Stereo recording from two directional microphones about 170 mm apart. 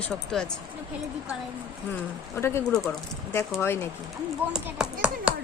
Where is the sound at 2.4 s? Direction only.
15° left (ahead or behind).